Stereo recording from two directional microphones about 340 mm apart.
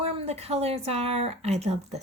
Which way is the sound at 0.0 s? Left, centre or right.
Centre.